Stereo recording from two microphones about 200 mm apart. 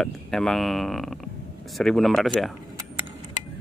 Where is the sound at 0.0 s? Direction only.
Centre (ahead or behind).